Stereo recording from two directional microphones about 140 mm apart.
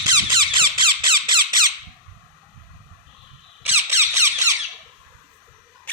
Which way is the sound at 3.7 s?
15° right (ahead or behind).